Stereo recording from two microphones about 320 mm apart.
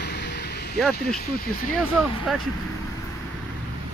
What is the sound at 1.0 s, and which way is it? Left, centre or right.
Speech, left.